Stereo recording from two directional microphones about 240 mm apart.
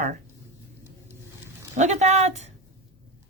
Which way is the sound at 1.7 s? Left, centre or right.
Right.